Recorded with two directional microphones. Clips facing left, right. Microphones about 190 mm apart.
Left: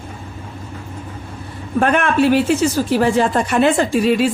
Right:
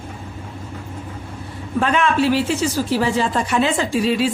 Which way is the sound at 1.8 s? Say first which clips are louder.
Left 3 dB; 55° left (ahead or behind).